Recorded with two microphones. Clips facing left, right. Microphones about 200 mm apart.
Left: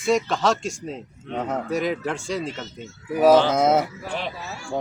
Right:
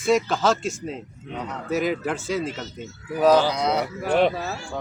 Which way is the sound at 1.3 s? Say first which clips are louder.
Left 6 dB; 45° left (ahead or behind).